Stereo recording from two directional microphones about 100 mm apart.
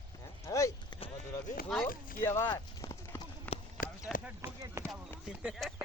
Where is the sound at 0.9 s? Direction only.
65° left (ahead or behind).